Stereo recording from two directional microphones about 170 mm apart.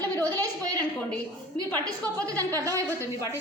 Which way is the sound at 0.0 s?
20° right (ahead or behind).